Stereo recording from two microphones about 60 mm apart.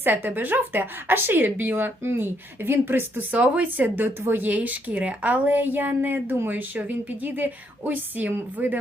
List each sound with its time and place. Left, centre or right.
0.0 s a woman's voice: right
3.3 s a woman's voice: right